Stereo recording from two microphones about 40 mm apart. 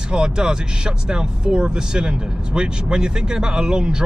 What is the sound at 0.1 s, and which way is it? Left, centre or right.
Speech, centre.